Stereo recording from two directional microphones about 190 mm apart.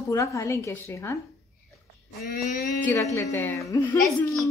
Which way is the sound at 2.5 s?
45° left (ahead or behind).